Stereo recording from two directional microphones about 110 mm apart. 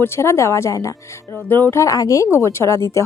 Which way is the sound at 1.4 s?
15° left (ahead or behind).